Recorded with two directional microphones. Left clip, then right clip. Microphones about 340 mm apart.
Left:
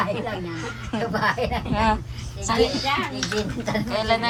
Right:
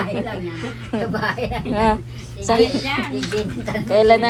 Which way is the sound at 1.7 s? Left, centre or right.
Centre.